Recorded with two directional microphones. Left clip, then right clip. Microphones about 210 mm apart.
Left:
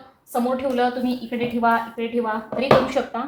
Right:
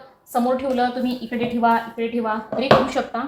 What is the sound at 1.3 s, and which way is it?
Speech, 25° right (ahead or behind).